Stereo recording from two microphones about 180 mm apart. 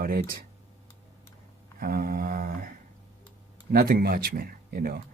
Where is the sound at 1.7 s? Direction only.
55° right (ahead or behind).